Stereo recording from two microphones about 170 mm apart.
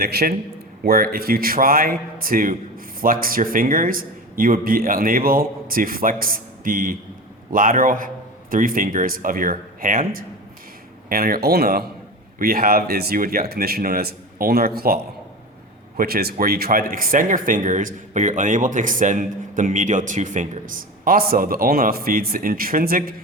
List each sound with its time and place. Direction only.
0.0 s a man's voice: 65° right (ahead or behind)
16.0 s speech: 65° right (ahead or behind)